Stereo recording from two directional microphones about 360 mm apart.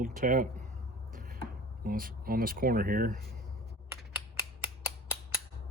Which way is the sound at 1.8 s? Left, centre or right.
Right.